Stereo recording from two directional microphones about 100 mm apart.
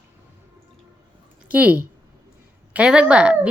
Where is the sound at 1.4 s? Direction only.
15° right (ahead or behind).